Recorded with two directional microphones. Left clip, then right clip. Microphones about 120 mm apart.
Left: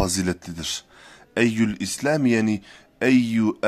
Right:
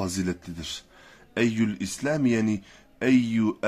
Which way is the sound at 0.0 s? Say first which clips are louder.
Left 6 dB; 55° left (ahead or behind).